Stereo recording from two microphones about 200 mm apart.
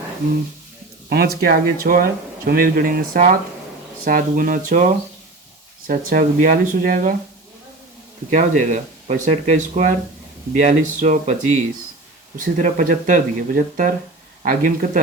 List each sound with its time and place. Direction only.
1.1 s speech: 50° right (ahead or behind)
5.9 s speech: 45° right (ahead or behind)
8.3 s speech: 40° right (ahead or behind)